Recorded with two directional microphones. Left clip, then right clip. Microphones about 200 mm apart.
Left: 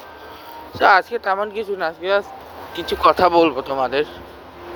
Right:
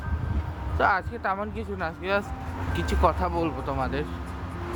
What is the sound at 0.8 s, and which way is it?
Speech, 40° left (ahead or behind).